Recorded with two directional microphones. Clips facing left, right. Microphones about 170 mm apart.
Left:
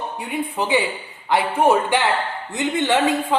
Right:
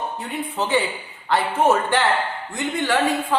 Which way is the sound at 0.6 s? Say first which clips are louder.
Even; 15° left (ahead or behind).